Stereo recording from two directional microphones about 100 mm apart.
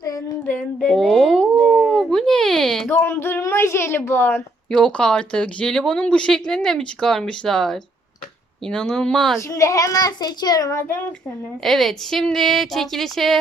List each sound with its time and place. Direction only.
0.8 s a sound: 5° left (ahead or behind)
4.7 s speech: 10° left (ahead or behind)
9.4 s a child's voice: 30° left (ahead or behind)
11.6 s speech: centre (ahead or behind)